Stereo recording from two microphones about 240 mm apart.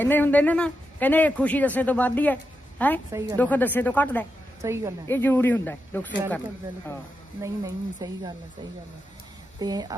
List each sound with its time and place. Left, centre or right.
0.0 s a man's voice: centre
3.1 s speech: centre
3.3 s a man's voice: centre
4.6 s speech: centre
5.0 s a man's voice: centre
7.4 s speech: centre
9.6 s speech: centre